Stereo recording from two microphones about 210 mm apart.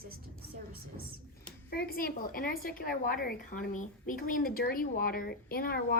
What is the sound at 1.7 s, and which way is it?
A woman's voice, 45° left (ahead or behind).